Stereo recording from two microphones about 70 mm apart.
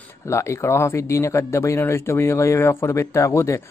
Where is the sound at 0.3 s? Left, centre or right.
Left.